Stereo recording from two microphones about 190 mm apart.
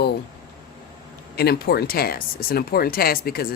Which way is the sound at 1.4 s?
55° left (ahead or behind).